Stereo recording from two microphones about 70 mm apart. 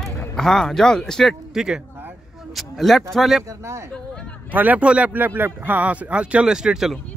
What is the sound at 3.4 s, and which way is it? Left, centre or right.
Speech, right.